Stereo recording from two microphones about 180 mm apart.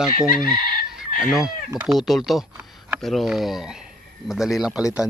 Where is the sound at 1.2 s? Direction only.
5° right (ahead or behind).